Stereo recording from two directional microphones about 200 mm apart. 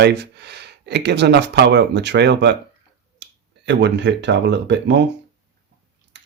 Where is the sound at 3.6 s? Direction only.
60° right (ahead or behind).